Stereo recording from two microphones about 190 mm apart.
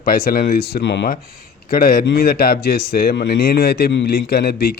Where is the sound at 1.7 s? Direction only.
50° left (ahead or behind).